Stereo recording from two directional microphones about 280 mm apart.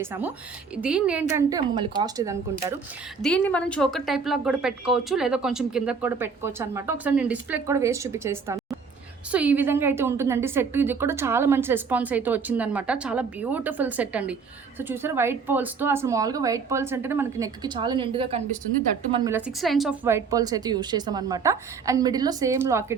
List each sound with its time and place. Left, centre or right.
0.0 s a woman's voice: centre
3.2 s a woman's voice: centre
19.4 s a woman's voice: centre